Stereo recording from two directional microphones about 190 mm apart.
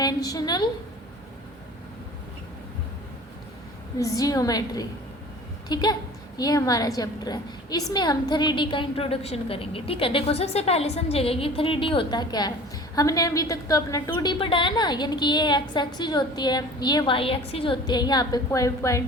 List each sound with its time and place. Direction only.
0.0 s a woman's voice: 20° left (ahead or behind)
3.9 s a woman's voice: 20° left (ahead or behind)